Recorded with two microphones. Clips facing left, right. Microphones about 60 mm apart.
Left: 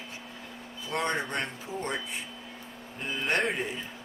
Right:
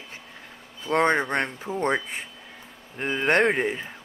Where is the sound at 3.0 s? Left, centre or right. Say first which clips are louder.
Right 8 dB; right.